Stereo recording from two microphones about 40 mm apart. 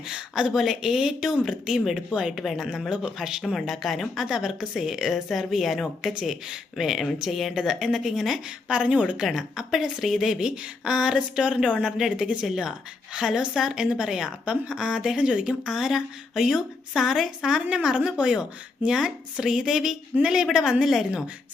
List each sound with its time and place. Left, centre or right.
0.1 s a woman's voice: centre
2.4 s a woman's voice: centre
3.4 s a woman's voice: centre
8.7 s speech: right
9.2 s speech: centre
10.3 s speech: centre
11.9 s a woman's voice: centre
12.1 s speech: right
12.5 s a woman's voice: centre
14.4 s a woman's voice: right
15.2 s speech: right
15.6 s a woman's voice: centre